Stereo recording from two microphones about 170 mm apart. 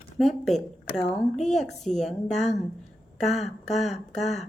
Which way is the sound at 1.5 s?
Centre (ahead or behind).